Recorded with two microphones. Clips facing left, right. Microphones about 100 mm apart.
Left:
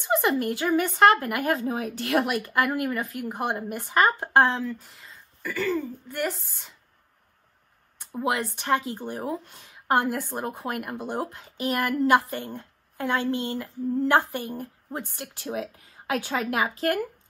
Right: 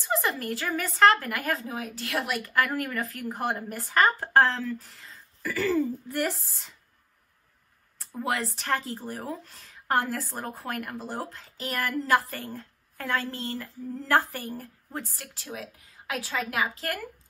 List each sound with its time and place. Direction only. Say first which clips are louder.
0.0 s a woman's voice: left 5 dB; 30° left (ahead or behind)
3.6 s speech: left 4 dB; 5° left (ahead or behind)
4.0 s a woman's voice: left 1 dB; 25° left (ahead or behind)
4.7 s speech: right 3 dB; centre (ahead or behind)
8.8 s a woman's voice: left 4 dB; 25° left (ahead or behind)